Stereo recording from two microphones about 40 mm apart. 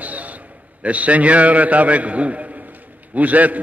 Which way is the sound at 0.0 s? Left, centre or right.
Right.